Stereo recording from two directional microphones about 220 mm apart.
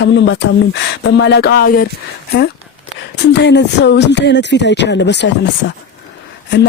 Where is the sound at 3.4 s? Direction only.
50° left (ahead or behind).